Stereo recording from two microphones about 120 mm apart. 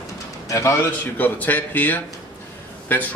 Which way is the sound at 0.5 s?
25° left (ahead or behind).